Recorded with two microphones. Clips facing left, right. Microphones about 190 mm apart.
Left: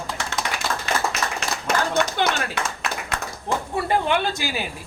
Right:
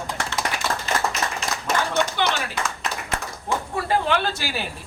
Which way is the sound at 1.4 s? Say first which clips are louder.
Left 2 dB; 65° left (ahead or behind).